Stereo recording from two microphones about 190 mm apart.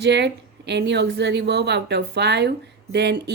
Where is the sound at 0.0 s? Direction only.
65° right (ahead or behind).